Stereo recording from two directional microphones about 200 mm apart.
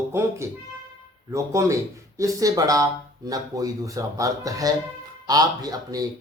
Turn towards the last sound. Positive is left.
turn(degrees=-20)  # may be behind; listen again after turning